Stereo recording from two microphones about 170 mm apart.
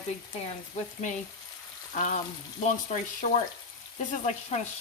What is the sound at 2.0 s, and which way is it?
Speech, 45° left (ahead or behind).